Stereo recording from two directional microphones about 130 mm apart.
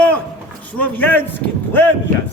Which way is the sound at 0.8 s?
10° left (ahead or behind).